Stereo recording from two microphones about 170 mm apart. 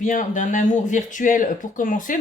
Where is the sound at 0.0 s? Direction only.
50° left (ahead or behind).